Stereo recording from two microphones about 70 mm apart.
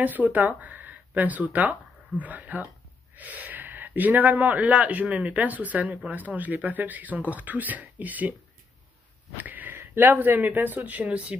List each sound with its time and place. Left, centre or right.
0.0 s speech: right
9.4 s speech: right